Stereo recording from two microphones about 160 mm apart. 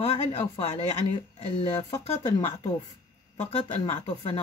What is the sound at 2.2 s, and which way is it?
Speech, 30° left (ahead or behind).